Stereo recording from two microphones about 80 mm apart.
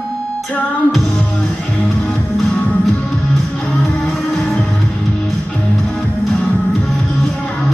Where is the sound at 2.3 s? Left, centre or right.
Centre.